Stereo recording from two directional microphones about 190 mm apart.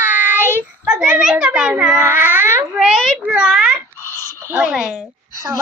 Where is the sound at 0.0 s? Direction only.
10° right (ahead or behind).